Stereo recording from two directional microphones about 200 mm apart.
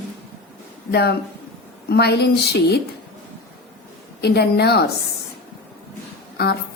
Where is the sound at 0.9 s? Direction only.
55° left (ahead or behind).